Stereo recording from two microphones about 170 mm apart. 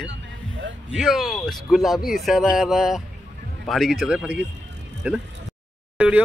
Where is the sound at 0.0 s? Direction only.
90° right.